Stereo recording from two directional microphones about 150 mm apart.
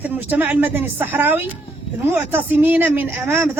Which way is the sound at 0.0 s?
10° right (ahead or behind).